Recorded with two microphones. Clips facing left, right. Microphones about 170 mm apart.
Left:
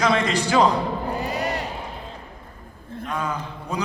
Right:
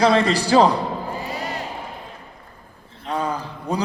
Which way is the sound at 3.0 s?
30° right (ahead or behind).